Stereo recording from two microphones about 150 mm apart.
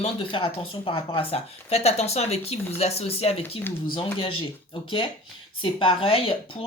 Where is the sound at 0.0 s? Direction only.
35° left (ahead or behind).